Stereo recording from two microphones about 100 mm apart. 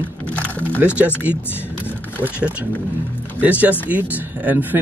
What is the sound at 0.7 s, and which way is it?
Speech, 15° right (ahead or behind).